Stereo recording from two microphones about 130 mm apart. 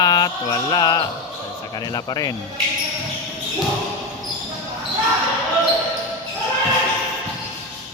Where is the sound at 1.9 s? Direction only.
30° left (ahead or behind).